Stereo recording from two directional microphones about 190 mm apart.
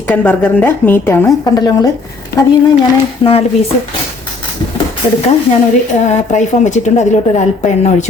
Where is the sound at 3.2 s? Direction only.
30° left (ahead or behind).